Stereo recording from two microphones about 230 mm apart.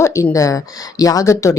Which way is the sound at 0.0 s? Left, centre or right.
Centre.